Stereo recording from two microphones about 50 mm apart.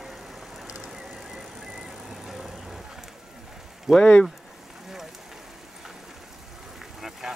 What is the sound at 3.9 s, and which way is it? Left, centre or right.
Speech, centre.